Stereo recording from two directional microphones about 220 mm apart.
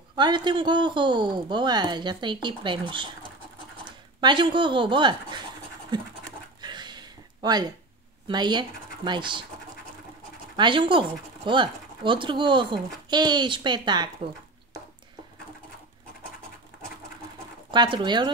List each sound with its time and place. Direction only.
0.1 s speech: 20° right (ahead or behind)
4.2 s speech: 20° right (ahead or behind)
6.6 s a sound: 20° right (ahead or behind)
8.3 s speech: 20° right (ahead or behind)
10.5 s speech: 20° right (ahead or behind)
17.6 s speech: 20° right (ahead or behind)